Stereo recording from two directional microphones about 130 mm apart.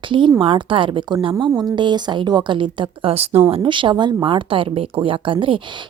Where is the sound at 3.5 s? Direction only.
40° right (ahead or behind).